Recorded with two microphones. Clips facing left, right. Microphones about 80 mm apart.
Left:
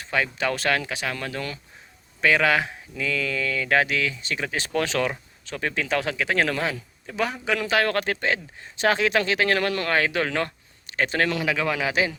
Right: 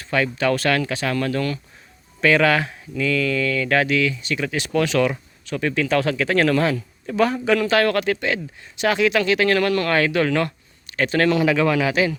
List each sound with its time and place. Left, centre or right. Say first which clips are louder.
0.0 s speech: right 4 dB; centre
7.9 s speech: right 3 dB; left
11.3 s speech: right 7 dB; centre
11.8 s speech: right 4 dB; left